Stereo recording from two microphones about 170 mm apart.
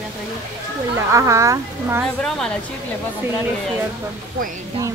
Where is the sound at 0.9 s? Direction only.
15° right (ahead or behind).